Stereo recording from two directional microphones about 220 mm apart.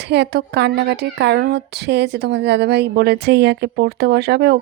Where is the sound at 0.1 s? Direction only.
50° right (ahead or behind).